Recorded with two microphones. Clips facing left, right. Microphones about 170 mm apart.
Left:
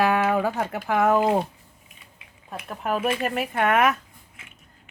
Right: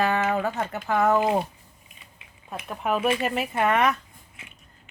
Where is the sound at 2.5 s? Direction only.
Centre (ahead or behind).